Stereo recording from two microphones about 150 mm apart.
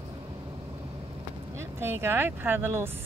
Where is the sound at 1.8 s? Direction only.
15° right (ahead or behind).